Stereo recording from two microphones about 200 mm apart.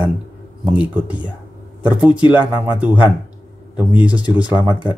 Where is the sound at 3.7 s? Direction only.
5° right (ahead or behind).